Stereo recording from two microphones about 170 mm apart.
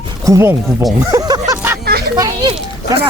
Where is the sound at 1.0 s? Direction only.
20° right (ahead or behind).